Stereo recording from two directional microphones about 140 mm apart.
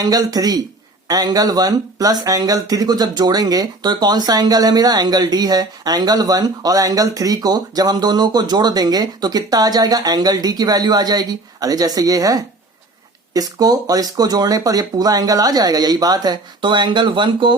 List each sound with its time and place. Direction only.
0.0 s speech: 25° right (ahead or behind)